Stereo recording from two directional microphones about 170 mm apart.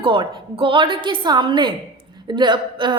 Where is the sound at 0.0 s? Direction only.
30° right (ahead or behind).